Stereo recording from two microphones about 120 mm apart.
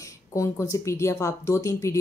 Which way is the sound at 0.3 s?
25° left (ahead or behind).